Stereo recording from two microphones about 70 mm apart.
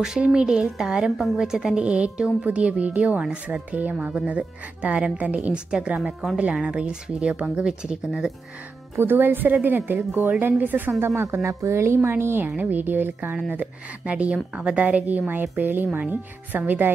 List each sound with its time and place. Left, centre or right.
0.0 s a woman's voice: centre
8.9 s a woman's voice: right
11.4 s a woman's voice: right